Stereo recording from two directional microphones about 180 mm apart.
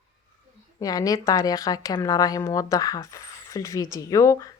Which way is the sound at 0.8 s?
20° left (ahead or behind).